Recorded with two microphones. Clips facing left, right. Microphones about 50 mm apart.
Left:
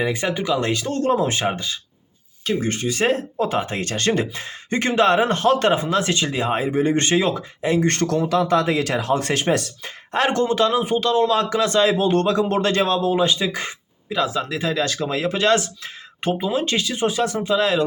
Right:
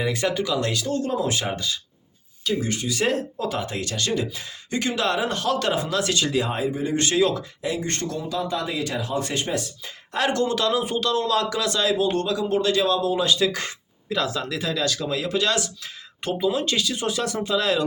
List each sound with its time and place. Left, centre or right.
0.0 s speech: left
0.9 s speech: left
2.4 s speech: left
6.7 s speech: left
7.8 s speech: left
10.1 s speech: left
13.5 s speech: centre